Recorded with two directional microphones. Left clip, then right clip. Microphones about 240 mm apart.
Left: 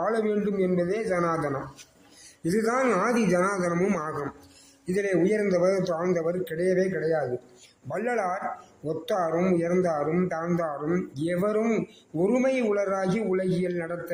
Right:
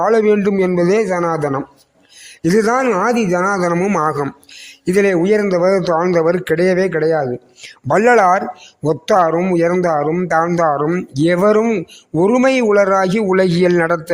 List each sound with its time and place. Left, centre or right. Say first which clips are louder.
0.0 s speech: right 13 dB; right